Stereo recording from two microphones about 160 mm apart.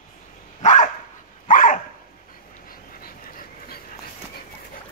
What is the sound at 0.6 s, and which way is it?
Dog, 50° left (ahead or behind).